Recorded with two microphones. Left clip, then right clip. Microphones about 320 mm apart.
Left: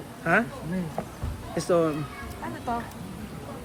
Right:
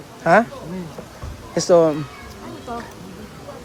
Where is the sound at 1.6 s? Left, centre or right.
Centre.